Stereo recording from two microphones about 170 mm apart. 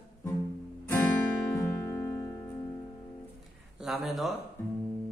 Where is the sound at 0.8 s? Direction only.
15° left (ahead or behind).